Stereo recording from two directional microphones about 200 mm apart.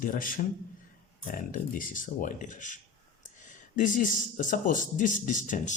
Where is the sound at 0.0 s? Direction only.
45° left (ahead or behind).